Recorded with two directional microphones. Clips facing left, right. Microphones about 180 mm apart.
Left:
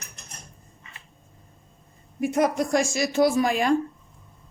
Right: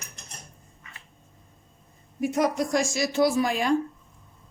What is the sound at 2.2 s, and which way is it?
A woman's voice, 55° left (ahead or behind).